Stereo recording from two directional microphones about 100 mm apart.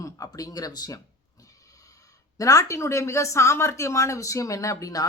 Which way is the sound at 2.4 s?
35° left (ahead or behind).